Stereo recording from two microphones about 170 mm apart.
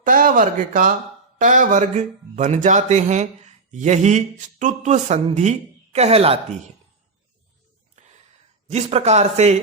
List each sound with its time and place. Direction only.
0.0 s speech: 50° right (ahead or behind); by 6.6 s 35° right (ahead or behind)
8.0 s a sound: 45° right (ahead or behind)
8.7 s speech: 40° right (ahead or behind)